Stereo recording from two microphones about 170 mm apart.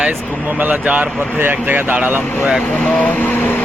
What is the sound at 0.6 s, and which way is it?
Speech, 10° right (ahead or behind).